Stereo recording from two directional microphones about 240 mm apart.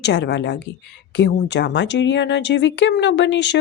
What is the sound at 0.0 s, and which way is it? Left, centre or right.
Speech, left.